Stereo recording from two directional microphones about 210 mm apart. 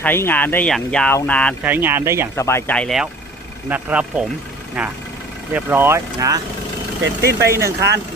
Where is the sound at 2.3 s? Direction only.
10° left (ahead or behind); by 6.4 s 15° right (ahead or behind).